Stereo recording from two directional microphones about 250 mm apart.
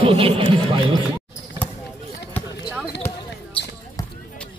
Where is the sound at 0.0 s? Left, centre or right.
Right.